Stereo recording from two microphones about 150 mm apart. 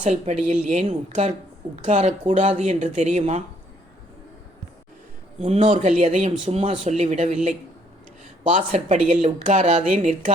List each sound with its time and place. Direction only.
0.0 s speech: 50° right (ahead or behind)
5.4 s speech: 45° right (ahead or behind)
8.5 s speech: 50° right (ahead or behind)